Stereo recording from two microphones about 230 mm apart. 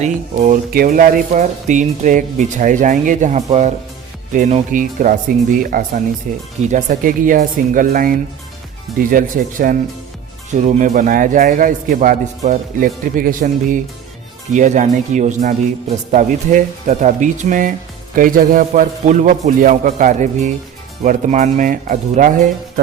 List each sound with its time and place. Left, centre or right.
0.0 s speech: right